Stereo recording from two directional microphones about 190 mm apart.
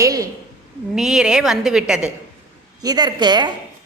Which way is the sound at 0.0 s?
15° right (ahead or behind).